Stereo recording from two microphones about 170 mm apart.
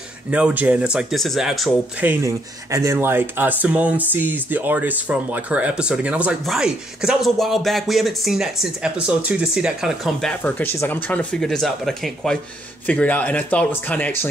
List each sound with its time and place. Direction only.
0.3 s speech: 5° right (ahead or behind)
2.0 s speech: 15° right (ahead or behind); by 10.3 s centre (ahead or behind)
10.4 s speech: 10° left (ahead or behind)